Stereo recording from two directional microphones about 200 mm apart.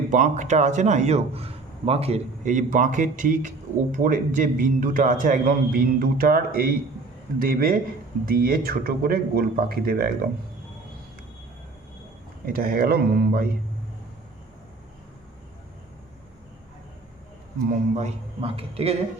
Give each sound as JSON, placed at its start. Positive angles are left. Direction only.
{"t": 0.1, "sound": "a man's voice", "side_deg": -40}
{"t": 12.5, "sound": "speech", "side_deg": -45}
{"t": 17.7, "sound": "a man's voice", "side_deg": -35}